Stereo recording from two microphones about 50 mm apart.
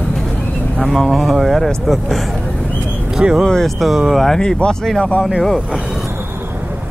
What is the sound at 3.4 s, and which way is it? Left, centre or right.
Speech, centre.